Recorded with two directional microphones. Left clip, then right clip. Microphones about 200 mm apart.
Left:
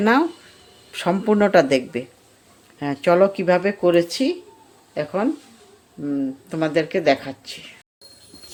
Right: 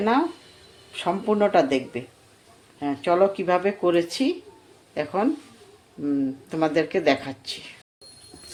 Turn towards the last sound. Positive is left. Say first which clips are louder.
# left 4 dB
turn(degrees=15)  # may be behind; listen again after turning